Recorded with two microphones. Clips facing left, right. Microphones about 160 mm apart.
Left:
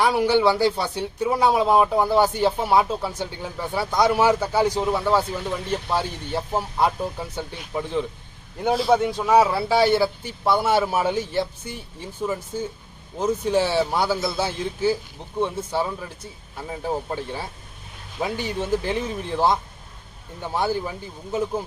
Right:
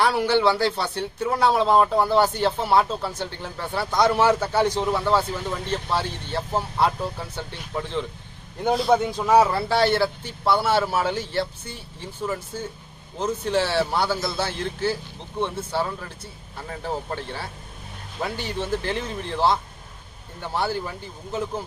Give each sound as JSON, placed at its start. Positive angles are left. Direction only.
{"t": 0.0, "sound": "speech", "side_deg": 10}